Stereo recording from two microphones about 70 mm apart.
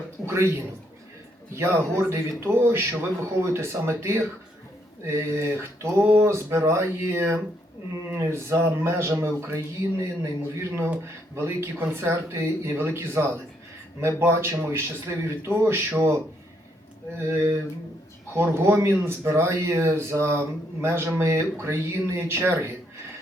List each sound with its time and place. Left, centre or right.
0.3 s a man's voice: right
1.5 s speech: right